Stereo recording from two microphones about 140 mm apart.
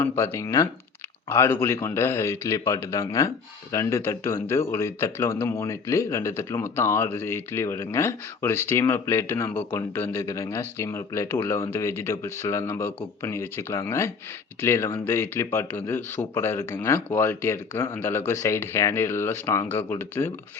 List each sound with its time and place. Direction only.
0.0 s a man's voice: 20° left (ahead or behind)